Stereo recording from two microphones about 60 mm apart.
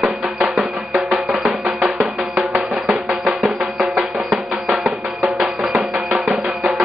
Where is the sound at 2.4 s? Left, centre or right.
Centre.